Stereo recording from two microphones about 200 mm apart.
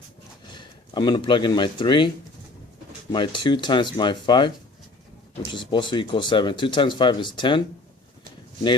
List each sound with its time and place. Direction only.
0.5 s speech: 20° left (ahead or behind)
3.1 s speech: 25° left (ahead or behind)